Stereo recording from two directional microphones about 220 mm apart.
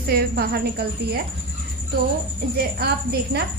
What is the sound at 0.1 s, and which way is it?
Speech, 45° right (ahead or behind).